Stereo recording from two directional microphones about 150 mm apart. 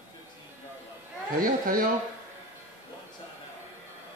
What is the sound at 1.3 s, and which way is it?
Speech, 70° right (ahead or behind).